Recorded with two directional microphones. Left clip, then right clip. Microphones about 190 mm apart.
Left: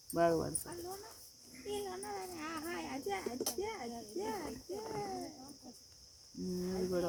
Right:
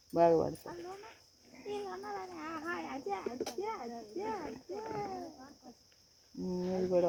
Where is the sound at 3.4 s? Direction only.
5° right (ahead or behind).